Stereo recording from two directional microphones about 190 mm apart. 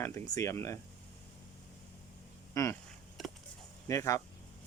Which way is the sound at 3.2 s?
Centre (ahead or behind).